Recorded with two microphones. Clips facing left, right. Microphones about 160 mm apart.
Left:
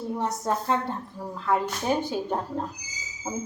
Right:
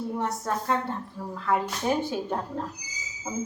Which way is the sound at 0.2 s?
20° left (ahead or behind).